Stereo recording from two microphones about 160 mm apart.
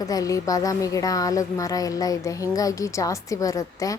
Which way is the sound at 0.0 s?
20° left (ahead or behind).